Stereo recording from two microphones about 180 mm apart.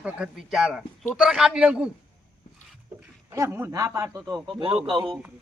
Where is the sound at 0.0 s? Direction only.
5° right (ahead or behind).